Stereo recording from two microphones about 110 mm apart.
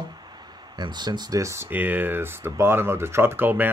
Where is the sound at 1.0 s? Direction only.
40° right (ahead or behind).